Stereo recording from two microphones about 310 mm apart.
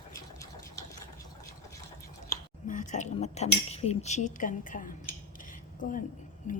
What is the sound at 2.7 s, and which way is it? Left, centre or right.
Speech, left.